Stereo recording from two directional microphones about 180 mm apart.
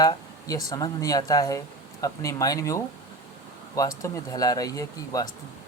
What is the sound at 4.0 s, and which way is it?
Speech, 20° left (ahead or behind).